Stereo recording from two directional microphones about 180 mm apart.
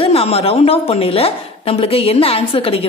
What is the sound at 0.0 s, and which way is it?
A woman's voice, 35° left (ahead or behind).